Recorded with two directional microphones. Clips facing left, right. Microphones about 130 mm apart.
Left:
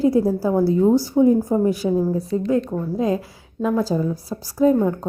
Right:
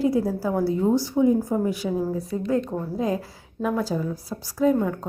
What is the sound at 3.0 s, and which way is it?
Speech, 20° left (ahead or behind).